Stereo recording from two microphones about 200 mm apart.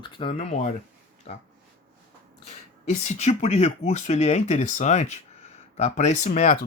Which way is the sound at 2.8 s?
35° left (ahead or behind).